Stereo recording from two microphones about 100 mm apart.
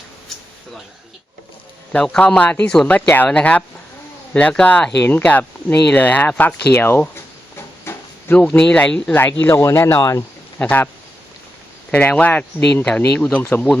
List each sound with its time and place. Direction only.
1.9 s speech: 15° left (ahead or behind)
7.5 s a sound: 25° left (ahead or behind)
9.4 s speech: 20° left (ahead or behind)
10.6 s speech: 15° left (ahead or behind)
11.9 s speech: 15° left (ahead or behind)